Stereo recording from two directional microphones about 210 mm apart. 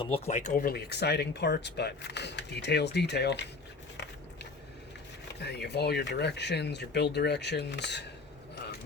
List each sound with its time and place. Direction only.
0.0 s speech: 30° left (ahead or behind); by 3.4 s 55° left (ahead or behind)
5.4 s speech: 50° left (ahead or behind)